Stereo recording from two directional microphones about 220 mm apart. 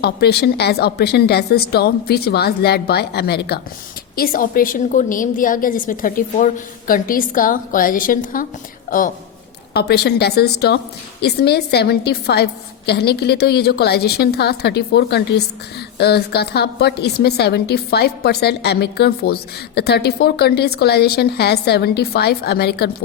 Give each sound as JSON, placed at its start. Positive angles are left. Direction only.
{"t": 0.0, "sound": "a woman's voice", "side_deg": 45}